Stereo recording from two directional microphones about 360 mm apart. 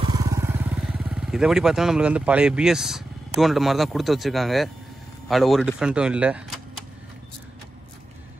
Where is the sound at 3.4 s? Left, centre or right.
Centre.